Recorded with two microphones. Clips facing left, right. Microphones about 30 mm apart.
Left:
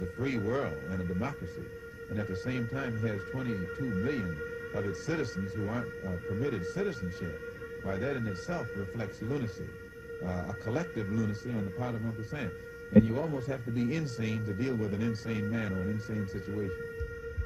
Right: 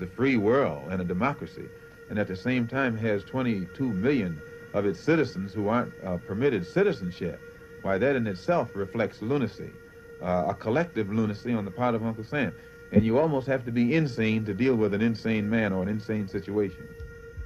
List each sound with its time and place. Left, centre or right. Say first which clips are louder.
0.0 s speech: right 9 dB; right
10.7 s speech: right 4 dB; right